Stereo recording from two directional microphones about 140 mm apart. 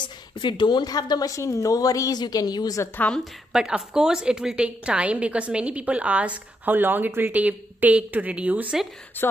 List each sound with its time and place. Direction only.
0.0 s a woman's voice: 35° left (ahead or behind)
3.5 s a woman's voice: 5° right (ahead or behind)
9.2 s speech: 15° left (ahead or behind)